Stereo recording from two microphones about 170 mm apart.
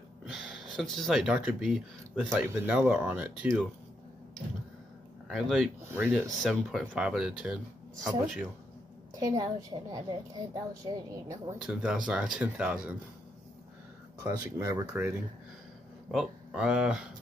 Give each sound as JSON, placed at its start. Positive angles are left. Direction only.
{"t": 0.2, "sound": "speech", "side_deg": -5}
{"t": 5.3, "sound": "speech", "side_deg": 0}
{"t": 5.8, "sound": "speech", "side_deg": -15}
{"t": 9.1, "sound": "a woman's voice", "side_deg": -20}
{"t": 11.5, "sound": "speech", "side_deg": -5}
{"t": 14.2, "sound": "a woman's voice", "side_deg": -20}